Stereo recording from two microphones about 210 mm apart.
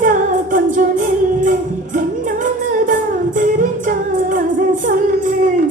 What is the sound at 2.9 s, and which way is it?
Music, 40° right (ahead or behind).